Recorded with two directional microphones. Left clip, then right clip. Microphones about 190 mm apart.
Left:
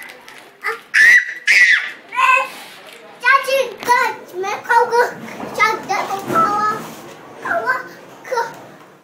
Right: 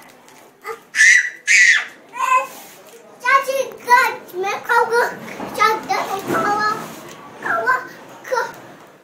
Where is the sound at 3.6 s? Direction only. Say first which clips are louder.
Right 1 dB; 15° left (ahead or behind).